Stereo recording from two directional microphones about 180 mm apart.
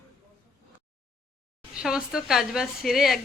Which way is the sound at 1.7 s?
5° right (ahead or behind).